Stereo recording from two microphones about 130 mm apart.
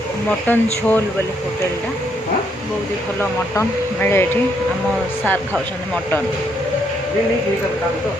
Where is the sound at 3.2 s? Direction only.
15° left (ahead or behind).